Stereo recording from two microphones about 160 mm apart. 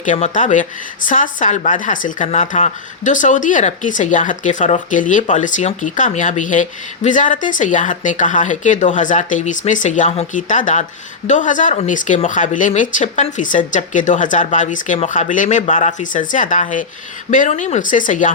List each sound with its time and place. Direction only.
0.0 s speech: 50° left (ahead or behind)